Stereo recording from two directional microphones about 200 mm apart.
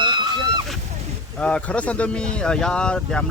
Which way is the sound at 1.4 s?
5° left (ahead or behind).